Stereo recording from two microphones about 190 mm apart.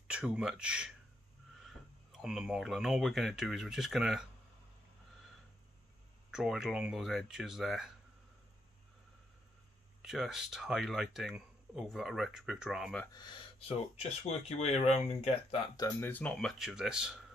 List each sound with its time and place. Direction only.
0.1 s speech: 5° right (ahead or behind)
2.1 s speech: 5° right (ahead or behind)
6.3 s speech: 5° right (ahead or behind)
10.0 s speech: centre (ahead or behind)
13.0 s speech: 20° left (ahead or behind); by 17.1 s 5° right (ahead or behind)